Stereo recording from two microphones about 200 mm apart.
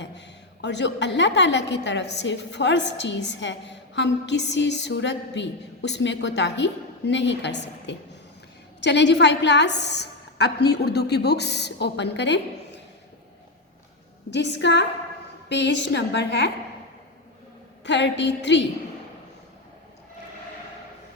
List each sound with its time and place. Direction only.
0.0 s a woman's voice: 60° left (ahead or behind)
14.3 s a woman's voice: 60° left (ahead or behind)
17.8 s a woman's voice: 60° left (ahead or behind)